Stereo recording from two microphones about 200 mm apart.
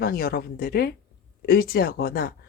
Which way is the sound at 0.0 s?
50° left (ahead or behind).